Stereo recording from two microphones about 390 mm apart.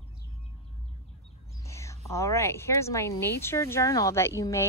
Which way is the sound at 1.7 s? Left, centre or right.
Centre.